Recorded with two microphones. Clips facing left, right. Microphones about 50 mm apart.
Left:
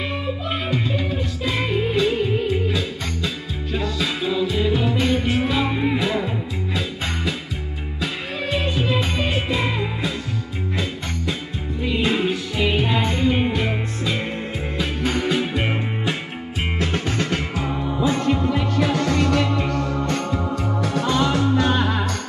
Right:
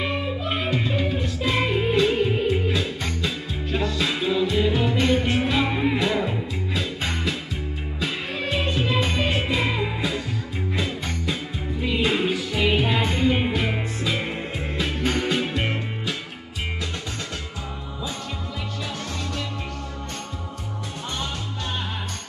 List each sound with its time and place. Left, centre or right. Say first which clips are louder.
0.5 s music: left 1 dB; centre
8.0 s music: left 1 dB; centre
11.8 s music: left 2 dB; centre
16.8 s music: left 8 dB; left
20.9 s music: left 11 dB; left